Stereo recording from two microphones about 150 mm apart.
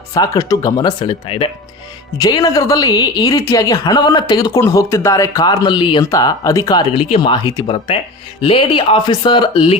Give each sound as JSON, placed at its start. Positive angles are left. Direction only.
{"t": 0.1, "sound": "speech", "side_deg": 25}
{"t": 1.0, "sound": "speech", "side_deg": 35}
{"t": 2.1, "sound": "speech", "side_deg": 25}
{"t": 8.4, "sound": "speech", "side_deg": 40}